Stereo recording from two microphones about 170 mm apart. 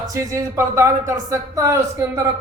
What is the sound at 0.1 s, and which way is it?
A woman's voice, 20° right (ahead or behind).